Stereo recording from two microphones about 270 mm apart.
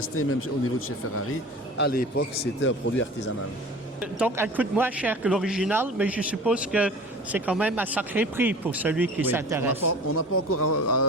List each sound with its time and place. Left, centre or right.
0.2 s a man's voice: left
1.8 s a man's voice: left
4.0 s speech: centre
10.1 s a man's voice: left